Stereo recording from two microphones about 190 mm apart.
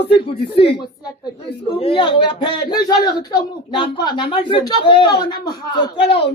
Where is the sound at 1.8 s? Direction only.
30° left (ahead or behind).